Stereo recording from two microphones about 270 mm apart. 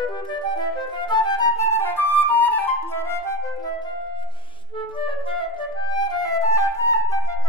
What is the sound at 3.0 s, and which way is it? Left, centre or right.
Flute, centre.